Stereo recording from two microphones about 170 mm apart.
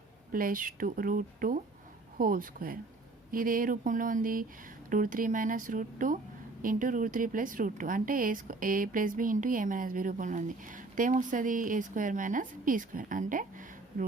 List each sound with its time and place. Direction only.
0.3 s a woman's voice: 55° right (ahead or behind)